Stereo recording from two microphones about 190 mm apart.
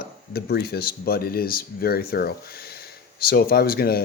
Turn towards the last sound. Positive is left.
turn(degrees=55)  # may be behind; listen again after turning